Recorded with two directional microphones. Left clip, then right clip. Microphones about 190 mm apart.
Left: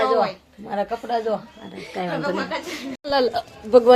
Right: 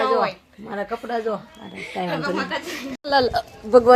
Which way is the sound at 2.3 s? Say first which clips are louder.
Right 1 dB; 40° right (ahead or behind).